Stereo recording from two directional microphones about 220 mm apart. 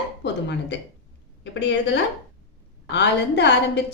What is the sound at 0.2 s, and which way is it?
Speech, 50° left (ahead or behind).